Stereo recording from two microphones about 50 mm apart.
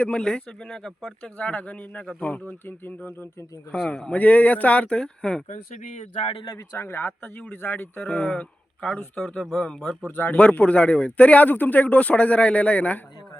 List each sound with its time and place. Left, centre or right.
0.0 s speech: centre
1.2 s speech: left
3.0 s speech: left
3.8 s speech: left
6.4 s a man's voice: left
6.7 s speech: left
8.0 s speech: left
8.9 s speech: centre
10.1 s speech: left
10.3 s speech: left